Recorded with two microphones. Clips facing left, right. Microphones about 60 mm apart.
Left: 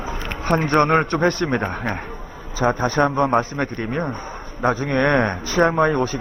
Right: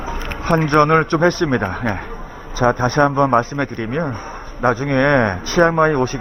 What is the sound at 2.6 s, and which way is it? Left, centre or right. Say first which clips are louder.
Mantra: right 4 dB; right.